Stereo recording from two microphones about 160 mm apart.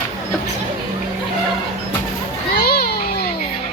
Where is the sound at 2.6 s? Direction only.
80° left.